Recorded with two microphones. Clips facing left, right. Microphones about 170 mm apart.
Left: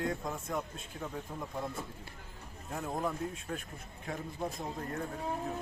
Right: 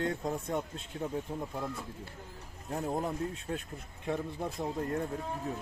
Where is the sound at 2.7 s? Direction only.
30° right (ahead or behind).